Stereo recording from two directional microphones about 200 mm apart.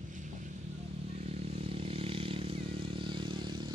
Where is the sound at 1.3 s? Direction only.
30° right (ahead or behind).